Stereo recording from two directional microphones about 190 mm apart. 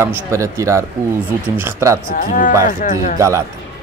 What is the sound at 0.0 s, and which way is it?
Speech, 15° right (ahead or behind).